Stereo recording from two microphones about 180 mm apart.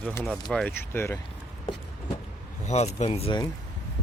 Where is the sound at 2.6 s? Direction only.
40° left (ahead or behind).